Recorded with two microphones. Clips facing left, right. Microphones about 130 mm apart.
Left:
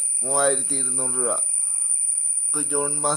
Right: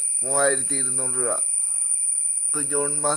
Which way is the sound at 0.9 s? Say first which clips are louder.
Left 1 dB; 20° left (ahead or behind).